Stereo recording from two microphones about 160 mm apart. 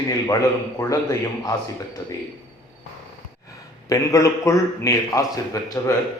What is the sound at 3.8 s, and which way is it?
A man's voice, 20° left (ahead or behind).